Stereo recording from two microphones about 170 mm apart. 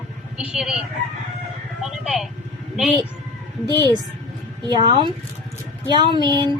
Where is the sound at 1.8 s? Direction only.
Centre (ahead or behind).